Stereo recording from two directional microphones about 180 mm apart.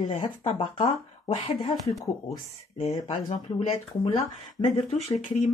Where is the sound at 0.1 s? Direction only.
35° left (ahead or behind).